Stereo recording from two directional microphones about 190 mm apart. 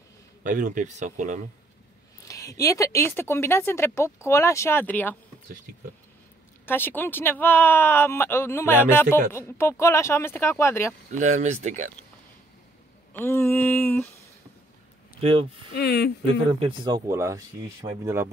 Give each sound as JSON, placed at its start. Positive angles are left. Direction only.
{"t": 0.4, "sound": "speech", "side_deg": -45}
{"t": 2.2, "sound": "a sound", "side_deg": 15}
{"t": 2.6, "sound": "speech", "side_deg": 15}
{"t": 6.6, "sound": "speech", "side_deg": 10}
{"t": 11.1, "sound": "speech", "side_deg": -40}
{"t": 13.1, "sound": "speech", "side_deg": 10}
{"t": 15.1, "sound": "speech", "side_deg": -30}
{"t": 15.7, "sound": "speech", "side_deg": 60}
{"t": 16.5, "sound": "speech", "side_deg": -25}